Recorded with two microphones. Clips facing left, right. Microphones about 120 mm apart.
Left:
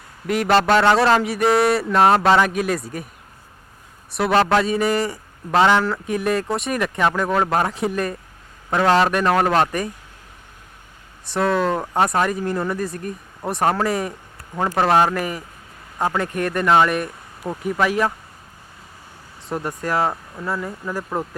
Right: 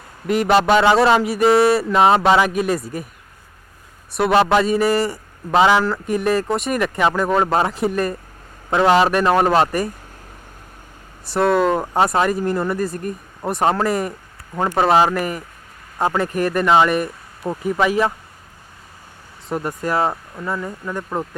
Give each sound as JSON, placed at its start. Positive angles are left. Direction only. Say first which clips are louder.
{"t": 0.3, "sound": "a man's voice", "louder": "right 2 dB", "side_deg": 0}
{"t": 4.1, "sound": "a man's voice", "louder": "right 2 dB", "side_deg": 0}
{"t": 11.3, "sound": "a man's voice", "louder": "right 3 dB", "side_deg": -5}
{"t": 19.5, "sound": "a man's voice", "louder": "right 2 dB", "side_deg": 0}